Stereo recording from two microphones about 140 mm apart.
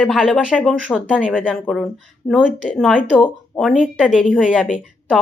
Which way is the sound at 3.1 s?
10° left (ahead or behind).